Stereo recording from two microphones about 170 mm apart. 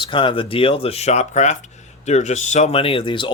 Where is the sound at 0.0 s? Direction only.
30° left (ahead or behind).